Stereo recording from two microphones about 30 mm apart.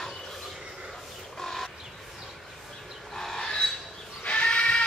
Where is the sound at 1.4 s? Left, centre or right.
Centre.